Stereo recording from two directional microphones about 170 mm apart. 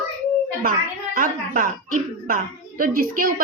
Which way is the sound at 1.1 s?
55° right (ahead or behind).